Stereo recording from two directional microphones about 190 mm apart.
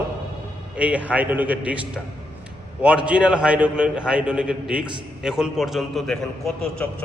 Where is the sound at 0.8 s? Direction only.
5° right (ahead or behind).